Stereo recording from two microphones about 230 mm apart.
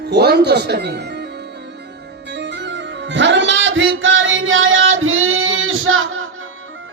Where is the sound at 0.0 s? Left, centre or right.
Right.